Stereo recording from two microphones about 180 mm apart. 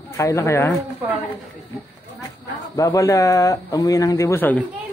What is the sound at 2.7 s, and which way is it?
A man's voice, 20° left (ahead or behind).